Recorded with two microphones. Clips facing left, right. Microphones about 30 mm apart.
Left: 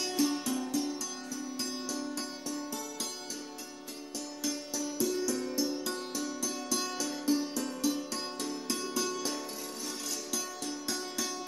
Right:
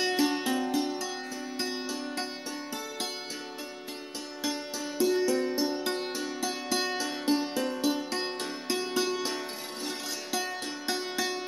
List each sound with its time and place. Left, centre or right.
0.0 s music: right
4.4 s music: right